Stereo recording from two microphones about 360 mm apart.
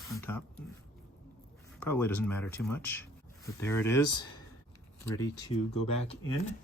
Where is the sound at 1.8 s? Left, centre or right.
Centre.